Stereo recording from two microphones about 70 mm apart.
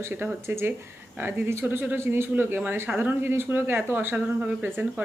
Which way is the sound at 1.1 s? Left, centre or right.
Right.